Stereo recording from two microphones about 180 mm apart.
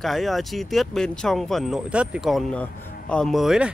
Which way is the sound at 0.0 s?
Centre (ahead or behind).